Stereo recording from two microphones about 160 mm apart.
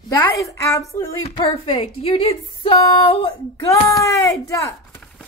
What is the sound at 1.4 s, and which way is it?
A woman's voice, 35° left (ahead or behind).